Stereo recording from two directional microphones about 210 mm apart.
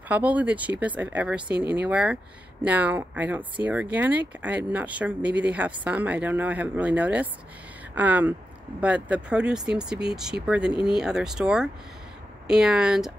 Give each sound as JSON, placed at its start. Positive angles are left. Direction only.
{"t": 0.1, "sound": "speech", "side_deg": -5}